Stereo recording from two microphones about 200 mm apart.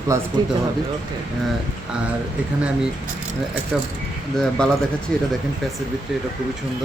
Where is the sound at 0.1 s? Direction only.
15° right (ahead or behind).